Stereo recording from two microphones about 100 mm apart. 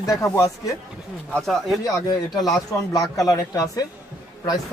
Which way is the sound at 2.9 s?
35° left (ahead or behind).